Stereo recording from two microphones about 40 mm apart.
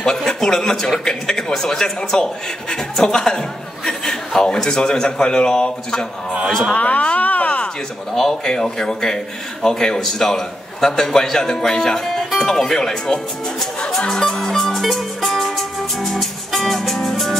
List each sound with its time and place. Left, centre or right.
0.0 s a man's voice: centre
6.4 s speech: right
6.7 s a sound: left
8.1 s a man's voice: centre
14.2 s music: centre